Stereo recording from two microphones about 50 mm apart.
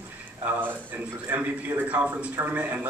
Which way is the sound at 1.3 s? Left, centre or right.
Right.